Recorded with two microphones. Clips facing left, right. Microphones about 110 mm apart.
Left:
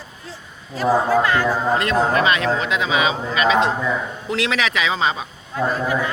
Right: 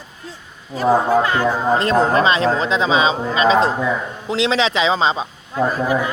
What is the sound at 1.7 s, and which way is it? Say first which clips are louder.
Speech: right 3 dB; 35° right (ahead or behind).